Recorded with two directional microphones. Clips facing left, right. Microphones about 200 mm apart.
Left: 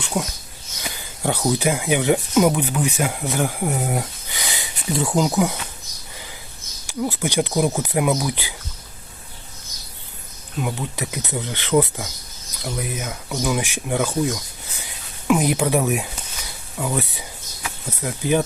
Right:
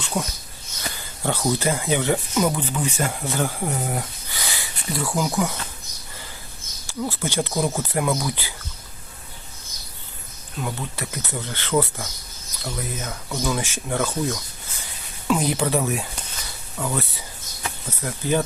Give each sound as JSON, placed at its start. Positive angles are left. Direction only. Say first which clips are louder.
{"t": 0.0, "sound": "speech", "louder": "left 2 dB", "side_deg": 5}
{"t": 6.8, "sound": "speech", "louder": "left 3 dB", "side_deg": 15}
{"t": 10.6, "sound": "speech", "louder": "left 3 dB", "side_deg": 15}